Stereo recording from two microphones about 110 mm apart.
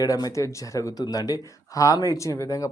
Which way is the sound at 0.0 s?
35° left (ahead or behind).